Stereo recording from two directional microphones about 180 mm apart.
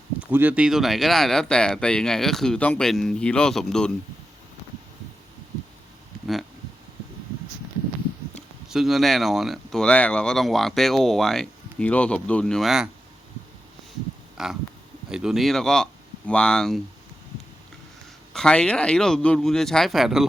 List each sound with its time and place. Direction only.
0.3 s speech: 10° right (ahead or behind)
8.4 s speech: centre (ahead or behind)
14.4 s speech: centre (ahead or behind)
18.3 s speech: 5° left (ahead or behind)